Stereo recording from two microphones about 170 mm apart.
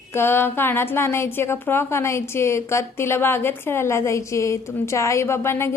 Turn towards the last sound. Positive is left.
turn(degrees=15)  # may be behind; listen again after turning